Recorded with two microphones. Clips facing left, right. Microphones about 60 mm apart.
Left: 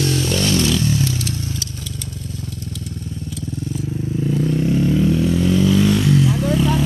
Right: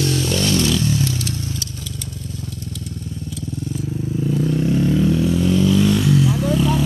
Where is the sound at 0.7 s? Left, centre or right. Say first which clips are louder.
Left 1 dB; centre.